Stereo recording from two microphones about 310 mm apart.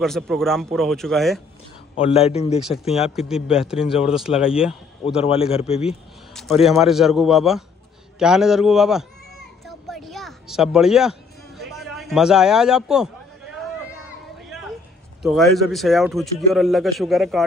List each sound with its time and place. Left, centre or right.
0.0 s a man's voice: centre
2.0 s a man's voice: centre
3.2 s a man's voice: centre
5.2 s a man's voice: centre
6.3 s a man's voice: centre
9.7 s a sound: centre
15.7 s a man's voice: centre